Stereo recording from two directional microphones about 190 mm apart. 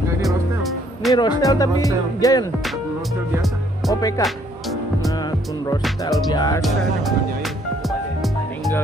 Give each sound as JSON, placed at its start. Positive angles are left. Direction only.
{"t": 0.2, "sound": "music", "side_deg": 0}
{"t": 1.1, "sound": "speech", "side_deg": 20}
{"t": 4.2, "sound": "music", "side_deg": 0}
{"t": 6.3, "sound": "speech", "side_deg": 20}
{"t": 6.6, "sound": "music", "side_deg": 0}